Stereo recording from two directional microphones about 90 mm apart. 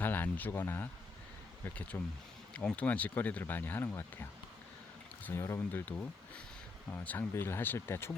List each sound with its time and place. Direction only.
0.0 s a sound: 20° left (ahead or behind)
1.7 s speech: 15° left (ahead or behind)
5.3 s speech: 30° left (ahead or behind)